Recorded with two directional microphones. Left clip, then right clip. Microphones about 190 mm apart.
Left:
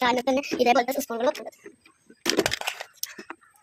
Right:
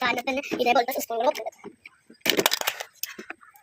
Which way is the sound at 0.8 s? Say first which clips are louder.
Even; 45° left (ahead or behind).